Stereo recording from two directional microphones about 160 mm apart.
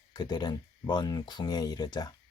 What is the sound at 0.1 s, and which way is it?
Speech, 25° left (ahead or behind).